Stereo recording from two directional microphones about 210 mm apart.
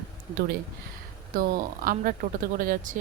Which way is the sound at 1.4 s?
45° right (ahead or behind).